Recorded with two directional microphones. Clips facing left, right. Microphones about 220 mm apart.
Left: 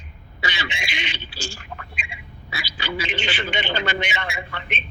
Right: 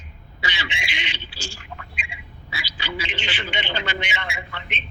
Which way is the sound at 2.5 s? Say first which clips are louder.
Left 2 dB; 45° left (ahead or behind).